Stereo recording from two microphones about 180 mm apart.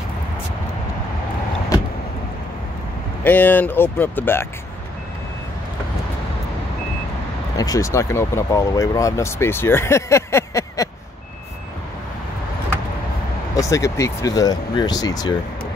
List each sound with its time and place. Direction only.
3.3 s speech: 10° left (ahead or behind)
7.5 s speech: 20° left (ahead or behind)
13.6 s speech: 15° left (ahead or behind)